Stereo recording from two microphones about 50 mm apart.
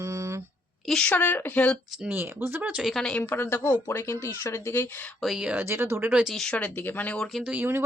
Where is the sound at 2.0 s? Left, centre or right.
Right.